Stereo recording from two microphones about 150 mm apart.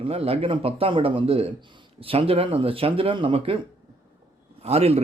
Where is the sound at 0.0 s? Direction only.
40° right (ahead or behind).